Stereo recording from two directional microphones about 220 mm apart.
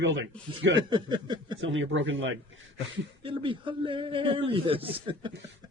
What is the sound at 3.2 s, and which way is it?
Speech, 25° right (ahead or behind).